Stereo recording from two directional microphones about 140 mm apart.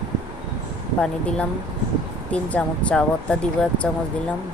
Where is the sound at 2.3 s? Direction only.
10° left (ahead or behind).